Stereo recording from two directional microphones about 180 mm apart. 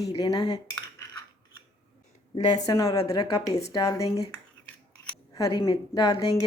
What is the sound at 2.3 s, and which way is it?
A woman's voice, 25° left (ahead or behind).